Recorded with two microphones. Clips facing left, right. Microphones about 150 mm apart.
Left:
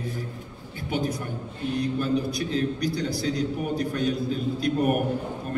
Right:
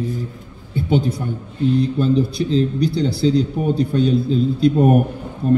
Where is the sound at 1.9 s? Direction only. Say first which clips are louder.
Right 8 dB; 30° right (ahead or behind).